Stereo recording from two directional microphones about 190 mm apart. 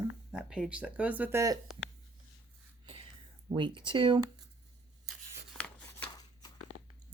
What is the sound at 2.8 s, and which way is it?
Whispering, 30° right (ahead or behind).